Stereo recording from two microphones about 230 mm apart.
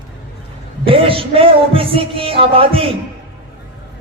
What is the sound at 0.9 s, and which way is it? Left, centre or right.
Music, right.